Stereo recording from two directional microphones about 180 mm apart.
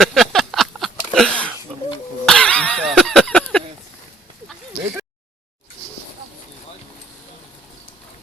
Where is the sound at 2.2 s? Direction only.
5° left (ahead or behind).